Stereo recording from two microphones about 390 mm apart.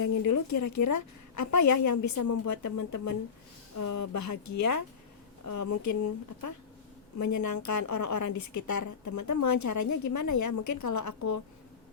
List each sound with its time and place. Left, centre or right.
0.0 s a woman's voice: left